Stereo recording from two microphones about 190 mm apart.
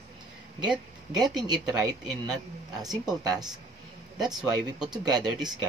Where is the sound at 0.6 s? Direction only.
20° right (ahead or behind).